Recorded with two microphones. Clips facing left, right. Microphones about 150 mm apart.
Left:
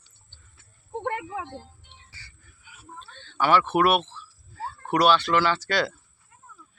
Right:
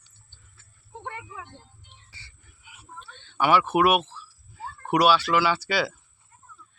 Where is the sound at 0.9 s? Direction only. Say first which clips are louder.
Left 9 dB; 70° left (ahead or behind); by 1.9 s 90° left.